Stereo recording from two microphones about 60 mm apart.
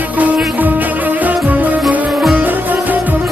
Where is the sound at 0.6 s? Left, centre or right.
Right.